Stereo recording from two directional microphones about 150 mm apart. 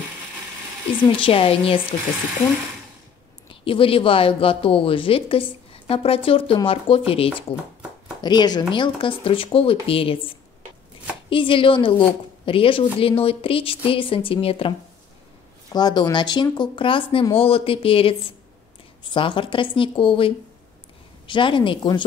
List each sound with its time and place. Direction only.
1.0 s a woman's voice: 35° left (ahead or behind)
3.6 s a woman's voice: 35° left (ahead or behind)
11.2 s a woman's voice: 35° left (ahead or behind)
15.7 s a woman's voice: 30° left (ahead or behind)